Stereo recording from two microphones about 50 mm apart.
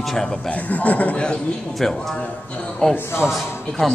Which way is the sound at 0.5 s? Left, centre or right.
Left.